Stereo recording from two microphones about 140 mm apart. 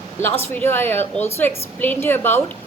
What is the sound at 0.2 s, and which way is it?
A woman's voice, 15° left (ahead or behind).